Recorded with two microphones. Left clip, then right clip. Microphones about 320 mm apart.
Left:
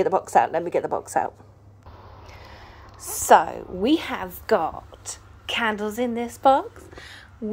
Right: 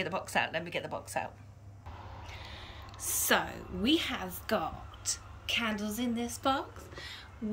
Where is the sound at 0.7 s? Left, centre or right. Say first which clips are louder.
Left 13 dB; left.